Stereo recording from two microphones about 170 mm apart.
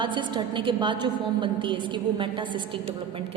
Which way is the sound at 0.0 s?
25° right (ahead or behind).